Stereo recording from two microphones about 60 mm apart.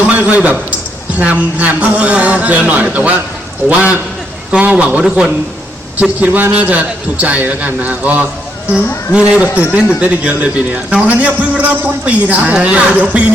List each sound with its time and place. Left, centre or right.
0.1 s a sound: right
1.2 s a man's voice: right
6.0 s a man's voice: right